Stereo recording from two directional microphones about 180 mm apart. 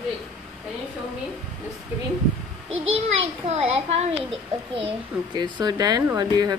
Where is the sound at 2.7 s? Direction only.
35° right (ahead or behind).